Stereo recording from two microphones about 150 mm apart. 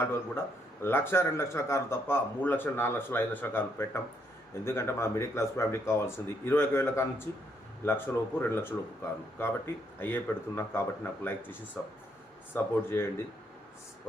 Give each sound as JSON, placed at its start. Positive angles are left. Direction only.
{"t": 0.0, "sound": "a man's voice", "side_deg": 15}
{"t": 12.5, "sound": "a man's voice", "side_deg": 15}